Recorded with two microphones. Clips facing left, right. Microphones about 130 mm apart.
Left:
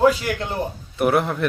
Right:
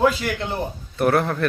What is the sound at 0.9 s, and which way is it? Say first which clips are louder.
Speech: even; 15° left (ahead or behind).